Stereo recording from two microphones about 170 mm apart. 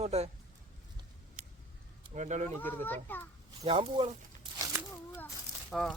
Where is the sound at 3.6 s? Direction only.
30° right (ahead or behind).